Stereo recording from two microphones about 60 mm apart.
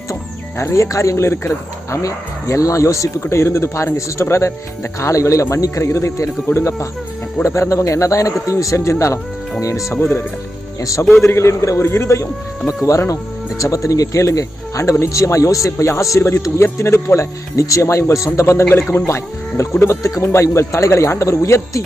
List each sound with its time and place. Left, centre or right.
0.6 s speech: left
9.9 s speech: left
10.8 s speech: left
11.3 s speech: left
17.2 s speech: left
20.2 s speech: left